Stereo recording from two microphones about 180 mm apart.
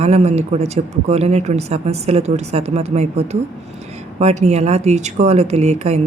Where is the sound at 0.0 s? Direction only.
35° right (ahead or behind).